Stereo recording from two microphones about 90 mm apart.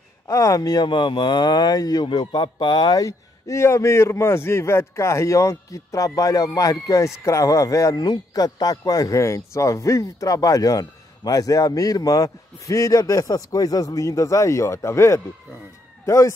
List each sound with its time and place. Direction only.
0.3 s speech: 40° left (ahead or behind)
0.8 s speech: 60° left (ahead or behind)
2.0 s speech: 65° left (ahead or behind)
3.0 s speech: 40° left (ahead or behind)
7.9 s speech: 50° left (ahead or behind); by 16.3 s 35° left (ahead or behind)